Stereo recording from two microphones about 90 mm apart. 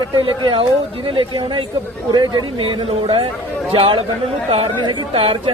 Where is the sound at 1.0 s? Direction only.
70° right (ahead or behind).